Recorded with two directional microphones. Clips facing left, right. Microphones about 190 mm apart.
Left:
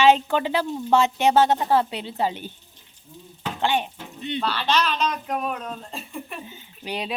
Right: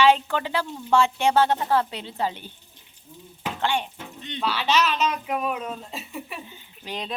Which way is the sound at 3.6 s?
15° left (ahead or behind).